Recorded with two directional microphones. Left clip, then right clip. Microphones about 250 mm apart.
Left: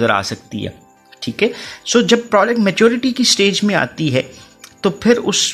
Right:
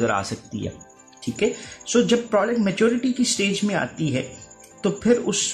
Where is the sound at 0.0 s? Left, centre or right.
Left.